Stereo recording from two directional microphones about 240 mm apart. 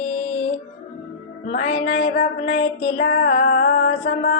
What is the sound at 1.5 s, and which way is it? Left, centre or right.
Female singing, left.